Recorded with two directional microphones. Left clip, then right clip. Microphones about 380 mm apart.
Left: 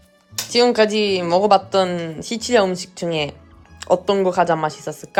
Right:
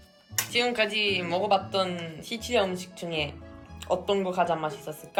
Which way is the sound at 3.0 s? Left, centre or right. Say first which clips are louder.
Left 9 dB; left.